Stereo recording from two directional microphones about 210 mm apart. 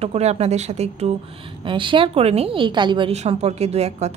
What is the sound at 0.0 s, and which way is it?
Speech, 30° right (ahead or behind).